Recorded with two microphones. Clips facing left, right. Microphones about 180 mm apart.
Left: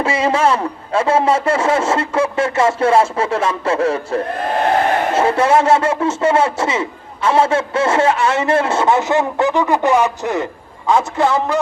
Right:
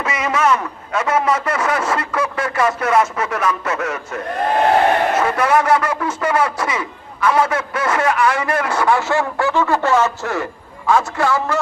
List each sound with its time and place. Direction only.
0.0 s a man's voice: 30° left (ahead or behind)